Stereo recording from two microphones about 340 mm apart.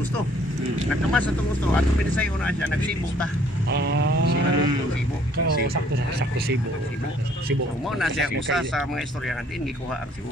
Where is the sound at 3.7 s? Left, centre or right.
Right.